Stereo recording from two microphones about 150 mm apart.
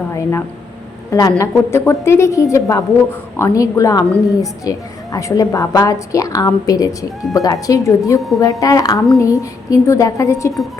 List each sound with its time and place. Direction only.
0.1 s a woman's voice: 20° left (ahead or behind)